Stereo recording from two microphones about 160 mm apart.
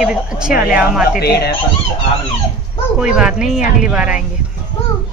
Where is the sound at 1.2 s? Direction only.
85° left.